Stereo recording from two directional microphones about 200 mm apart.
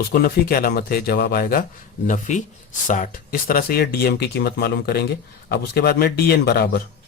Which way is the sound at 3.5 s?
45° left (ahead or behind).